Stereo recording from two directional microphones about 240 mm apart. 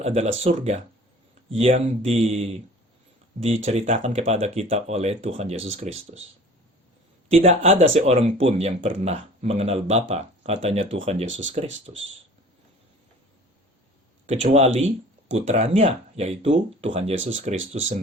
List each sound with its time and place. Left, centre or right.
0.0 s speech: right
3.7 s speech: right
7.3 s speech: right
14.3 s speech: right